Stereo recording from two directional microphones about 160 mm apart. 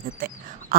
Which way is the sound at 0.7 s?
60° right (ahead or behind).